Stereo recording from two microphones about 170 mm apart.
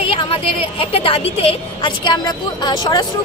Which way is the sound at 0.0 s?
35° left (ahead or behind).